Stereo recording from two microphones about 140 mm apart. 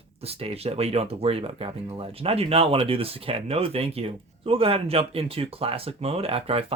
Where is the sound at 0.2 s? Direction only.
45° right (ahead or behind).